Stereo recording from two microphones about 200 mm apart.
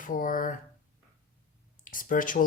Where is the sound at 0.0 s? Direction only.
45° left (ahead or behind).